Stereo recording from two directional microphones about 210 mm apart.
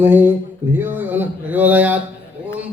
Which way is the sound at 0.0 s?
10° right (ahead or behind).